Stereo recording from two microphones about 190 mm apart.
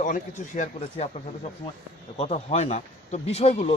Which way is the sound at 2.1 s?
35° left (ahead or behind).